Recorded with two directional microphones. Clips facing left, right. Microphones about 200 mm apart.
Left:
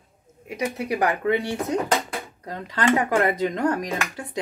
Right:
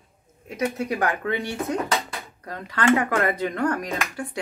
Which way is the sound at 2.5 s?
15° left (ahead or behind).